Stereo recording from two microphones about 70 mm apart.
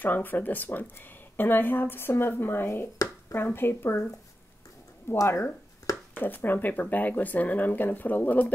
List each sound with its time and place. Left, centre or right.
0.0 s speech: left
5.1 s speech: left
6.1 s speech: left